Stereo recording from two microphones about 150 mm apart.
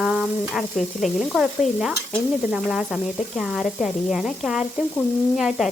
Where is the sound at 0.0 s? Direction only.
5° right (ahead or behind).